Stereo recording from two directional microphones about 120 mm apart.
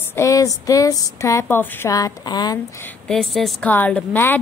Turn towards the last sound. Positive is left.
turn(degrees=15)  # may be behind; listen again after turning